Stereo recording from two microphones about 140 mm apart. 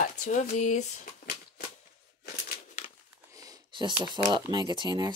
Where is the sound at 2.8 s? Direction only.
55° left (ahead or behind).